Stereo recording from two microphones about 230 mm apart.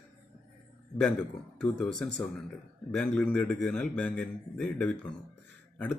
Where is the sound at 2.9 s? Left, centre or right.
Centre.